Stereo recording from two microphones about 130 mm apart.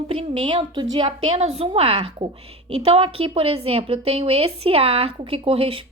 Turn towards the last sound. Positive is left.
turn(degrees=-45)  # may be behind; listen again after turning